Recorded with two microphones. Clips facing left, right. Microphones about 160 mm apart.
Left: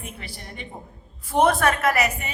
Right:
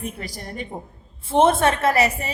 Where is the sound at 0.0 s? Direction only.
40° right (ahead or behind).